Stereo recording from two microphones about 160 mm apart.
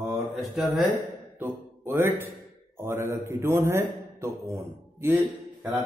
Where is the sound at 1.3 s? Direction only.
15° right (ahead or behind).